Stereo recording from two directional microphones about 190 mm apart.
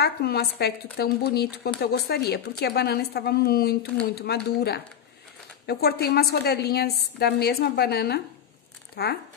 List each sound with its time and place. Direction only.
0.0 s speech: 55° left (ahead or behind)